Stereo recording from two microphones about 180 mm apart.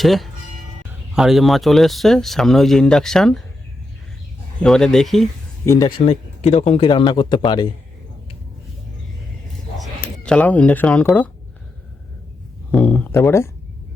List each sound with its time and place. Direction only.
0.0 s speech: centre (ahead or behind)
4.6 s speech: 5° left (ahead or behind)
5.6 s speech: 20° left (ahead or behind)
6.1 s speech: 35° left (ahead or behind)
10.2 s speech: 5° left (ahead or behind)
12.7 s a sound: 10° left (ahead or behind)